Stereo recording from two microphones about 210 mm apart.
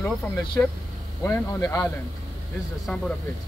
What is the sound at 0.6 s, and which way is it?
Speech, 10° left (ahead or behind).